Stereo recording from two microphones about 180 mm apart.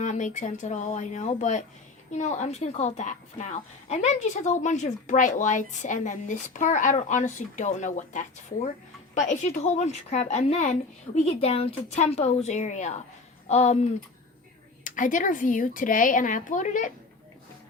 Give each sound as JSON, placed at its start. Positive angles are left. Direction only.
{"t": 0.0, "sound": "a woman's voice", "side_deg": 45}
{"t": 14.8, "sound": "a woman's voice", "side_deg": 45}